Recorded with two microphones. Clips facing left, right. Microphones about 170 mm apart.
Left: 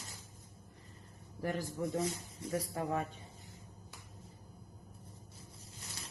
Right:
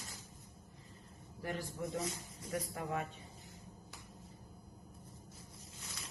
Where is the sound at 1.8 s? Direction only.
30° left (ahead or behind).